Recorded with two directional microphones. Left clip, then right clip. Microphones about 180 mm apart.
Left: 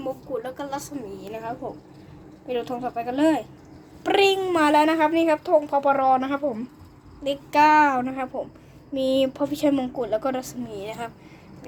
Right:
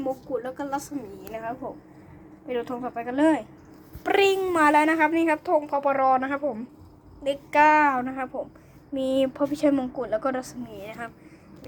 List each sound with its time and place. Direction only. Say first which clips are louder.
0.0 s a child's voice: right 1 dB; centre (ahead or behind)
10.7 s speech: left 4 dB; 20° left (ahead or behind)